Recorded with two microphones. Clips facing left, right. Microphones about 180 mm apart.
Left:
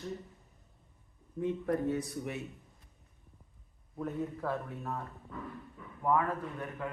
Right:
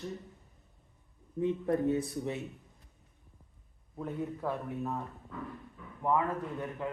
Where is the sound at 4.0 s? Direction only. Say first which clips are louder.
Even; 15° right (ahead or behind).